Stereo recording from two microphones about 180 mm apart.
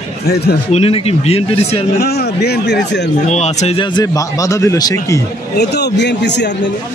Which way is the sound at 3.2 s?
40° left (ahead or behind).